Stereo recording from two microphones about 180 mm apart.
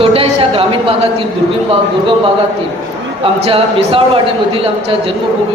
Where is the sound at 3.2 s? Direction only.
30° right (ahead or behind).